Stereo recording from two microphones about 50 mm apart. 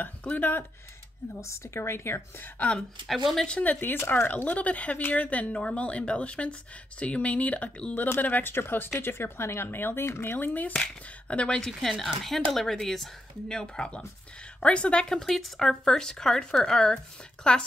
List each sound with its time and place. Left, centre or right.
0.4 s speech: left
1.4 s a woman's voice: left
3.1 s speech: centre
3.4 s speech: left
3.8 s speech: left
4.3 s speech: left
10.3 s speech: left
10.8 s speech: left
11.5 s speech: centre
13.5 s speech: centre
15.1 s speech: centre